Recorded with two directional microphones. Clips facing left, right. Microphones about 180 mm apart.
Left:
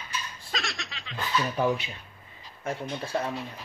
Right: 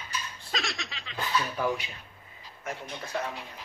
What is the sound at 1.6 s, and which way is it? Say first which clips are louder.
Speech: left 3 dB; 25° left (ahead or behind).